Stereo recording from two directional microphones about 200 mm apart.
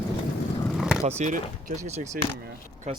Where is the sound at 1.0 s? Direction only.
35° right (ahead or behind).